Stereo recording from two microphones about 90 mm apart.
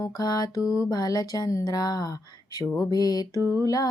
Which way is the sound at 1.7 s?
45° left (ahead or behind).